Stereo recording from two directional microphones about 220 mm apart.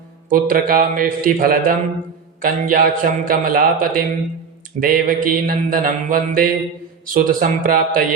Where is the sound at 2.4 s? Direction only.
40° right (ahead or behind).